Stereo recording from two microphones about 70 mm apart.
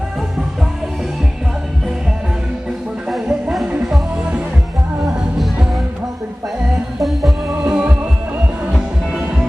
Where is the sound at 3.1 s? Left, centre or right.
Centre.